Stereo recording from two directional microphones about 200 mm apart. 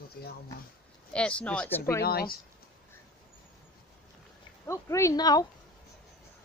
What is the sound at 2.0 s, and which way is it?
Speech, 50° left (ahead or behind).